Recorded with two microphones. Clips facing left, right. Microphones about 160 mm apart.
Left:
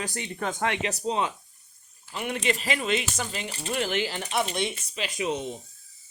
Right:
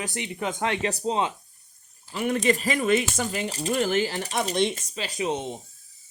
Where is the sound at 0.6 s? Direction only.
30° right (ahead or behind).